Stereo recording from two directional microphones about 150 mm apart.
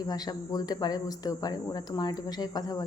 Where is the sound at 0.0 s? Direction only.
25° left (ahead or behind).